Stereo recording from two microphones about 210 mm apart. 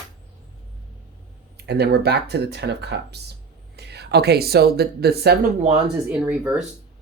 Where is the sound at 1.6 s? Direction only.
50° right (ahead or behind).